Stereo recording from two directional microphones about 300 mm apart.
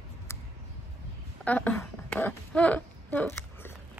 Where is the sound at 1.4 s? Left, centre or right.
Centre.